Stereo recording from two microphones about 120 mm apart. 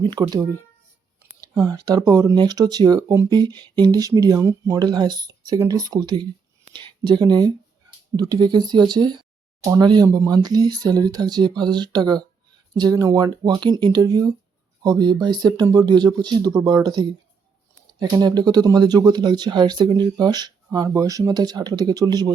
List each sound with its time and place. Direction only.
0.0 s speech: 40° right (ahead or behind)